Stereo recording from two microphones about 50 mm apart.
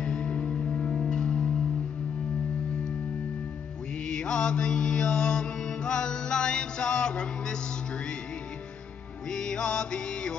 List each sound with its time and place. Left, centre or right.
0.0 s music: left
4.1 s mantra: centre
9.3 s music: centre